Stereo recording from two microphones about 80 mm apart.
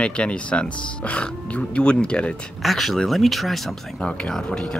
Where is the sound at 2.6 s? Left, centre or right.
Centre.